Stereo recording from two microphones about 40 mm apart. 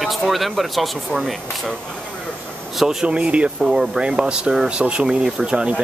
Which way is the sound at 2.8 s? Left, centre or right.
Right.